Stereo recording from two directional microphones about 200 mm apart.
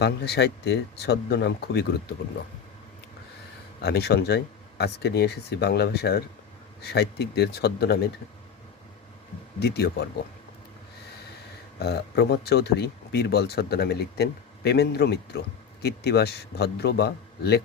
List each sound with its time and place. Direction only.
0.0 s speech: 55° left (ahead or behind)
3.8 s speech: 55° left (ahead or behind)
9.6 s speech: 55° left (ahead or behind)
11.8 s speech: 55° left (ahead or behind)